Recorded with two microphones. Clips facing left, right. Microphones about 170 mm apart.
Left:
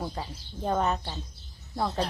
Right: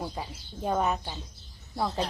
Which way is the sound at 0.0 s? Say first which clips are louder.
Left 1 dB; 5° right (ahead or behind).